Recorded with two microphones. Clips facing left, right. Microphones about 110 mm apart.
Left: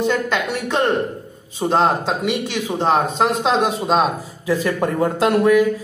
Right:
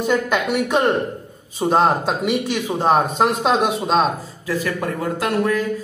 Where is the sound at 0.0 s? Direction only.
10° right (ahead or behind).